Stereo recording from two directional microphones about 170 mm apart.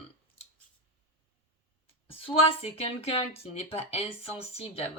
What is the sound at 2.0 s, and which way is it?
Speech, 35° left (ahead or behind).